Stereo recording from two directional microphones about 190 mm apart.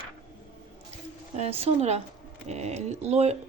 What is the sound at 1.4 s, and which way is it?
Speech, 30° right (ahead or behind).